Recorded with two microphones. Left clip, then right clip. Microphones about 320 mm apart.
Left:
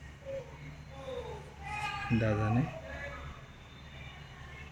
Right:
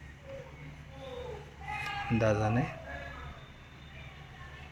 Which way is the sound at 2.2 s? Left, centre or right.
Right.